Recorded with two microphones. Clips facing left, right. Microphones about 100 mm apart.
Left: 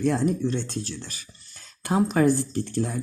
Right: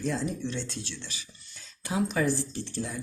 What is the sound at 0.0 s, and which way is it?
Speech, 55° left (ahead or behind).